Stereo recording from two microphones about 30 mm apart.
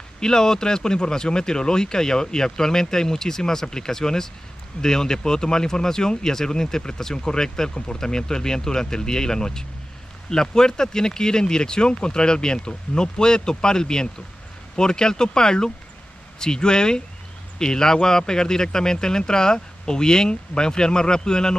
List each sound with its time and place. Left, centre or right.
0.2 s speech: centre